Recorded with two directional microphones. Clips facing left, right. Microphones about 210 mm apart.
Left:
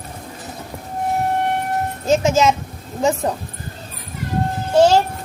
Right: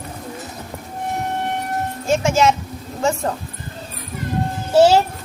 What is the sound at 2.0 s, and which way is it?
A child's voice, 20° left (ahead or behind).